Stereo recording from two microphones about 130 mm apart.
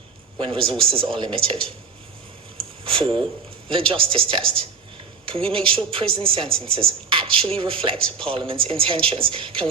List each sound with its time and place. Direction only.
0.3 s a woman's voice: 40° right (ahead or behind)
2.8 s a woman's voice: 40° right (ahead or behind)